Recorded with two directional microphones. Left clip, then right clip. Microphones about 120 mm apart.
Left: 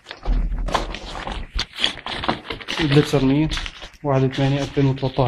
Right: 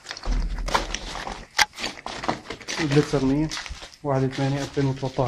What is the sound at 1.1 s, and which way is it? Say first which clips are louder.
Walk: left 3 dB; 25° right (ahead or behind).